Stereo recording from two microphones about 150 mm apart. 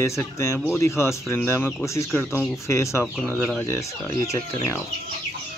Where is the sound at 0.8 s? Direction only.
15° left (ahead or behind).